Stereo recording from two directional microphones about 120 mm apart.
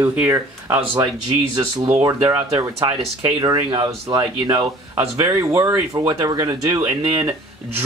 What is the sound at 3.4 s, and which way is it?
Speech, 40° right (ahead or behind).